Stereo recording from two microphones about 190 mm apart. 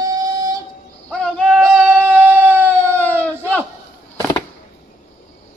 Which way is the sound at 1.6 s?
15° right (ahead or behind).